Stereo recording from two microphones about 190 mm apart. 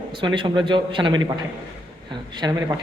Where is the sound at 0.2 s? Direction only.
25° right (ahead or behind).